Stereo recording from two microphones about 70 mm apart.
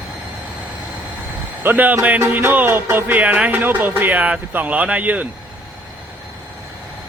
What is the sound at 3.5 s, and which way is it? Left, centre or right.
Speech, right.